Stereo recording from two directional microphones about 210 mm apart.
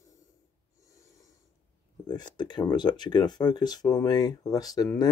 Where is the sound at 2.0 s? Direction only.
20° left (ahead or behind).